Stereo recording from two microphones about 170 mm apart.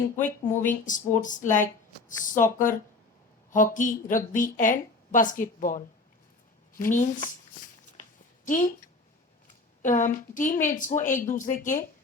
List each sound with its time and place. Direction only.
0.6 s a woman's voice: 50° left (ahead or behind)
8.4 s a woman's voice: 50° left (ahead or behind)
9.8 s a woman's voice: 50° left (ahead or behind)